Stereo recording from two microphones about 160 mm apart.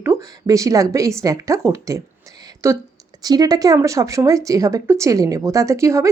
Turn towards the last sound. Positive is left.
turn(degrees=-20)  # may be behind; listen again after turning